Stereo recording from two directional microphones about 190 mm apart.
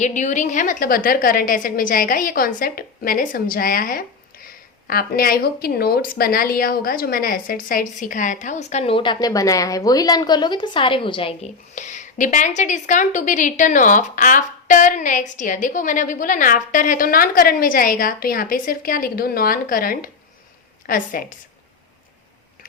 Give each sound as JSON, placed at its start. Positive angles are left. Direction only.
{"t": 0.0, "sound": "a woman's voice", "side_deg": 40}
{"t": 11.7, "sound": "a woman's voice", "side_deg": 40}